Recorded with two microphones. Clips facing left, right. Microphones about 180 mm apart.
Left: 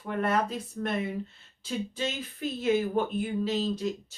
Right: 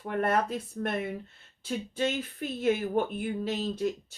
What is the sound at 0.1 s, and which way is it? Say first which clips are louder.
A woman's voice: even; 55° right (ahead or behind).